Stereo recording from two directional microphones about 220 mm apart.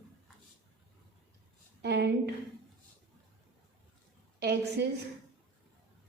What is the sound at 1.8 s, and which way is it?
Speech, 50° right (ahead or behind).